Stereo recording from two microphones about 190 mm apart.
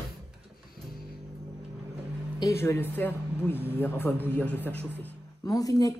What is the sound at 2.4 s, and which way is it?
Speech, 15° left (ahead or behind).